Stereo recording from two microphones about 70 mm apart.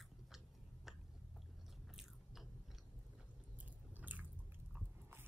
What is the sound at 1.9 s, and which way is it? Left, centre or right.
Biting, centre.